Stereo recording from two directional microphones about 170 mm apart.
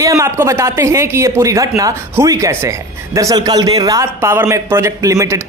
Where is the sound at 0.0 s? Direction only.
20° right (ahead or behind).